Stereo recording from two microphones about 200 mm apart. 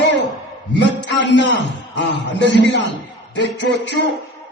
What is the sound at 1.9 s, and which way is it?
A man's voice, 60° left (ahead or behind).